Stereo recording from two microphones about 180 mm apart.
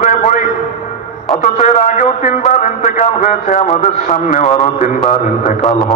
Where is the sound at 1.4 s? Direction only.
40° left (ahead or behind).